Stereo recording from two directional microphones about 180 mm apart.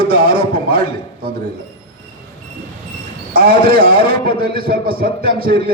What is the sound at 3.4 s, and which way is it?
A man's voice, 55° right (ahead or behind).